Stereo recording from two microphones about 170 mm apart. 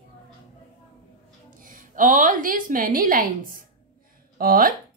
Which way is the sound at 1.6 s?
50° right (ahead or behind).